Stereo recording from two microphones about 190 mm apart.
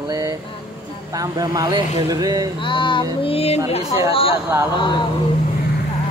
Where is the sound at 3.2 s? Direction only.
30° left (ahead or behind).